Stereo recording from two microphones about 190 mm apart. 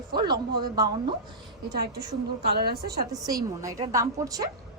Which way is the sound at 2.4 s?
55° right (ahead or behind).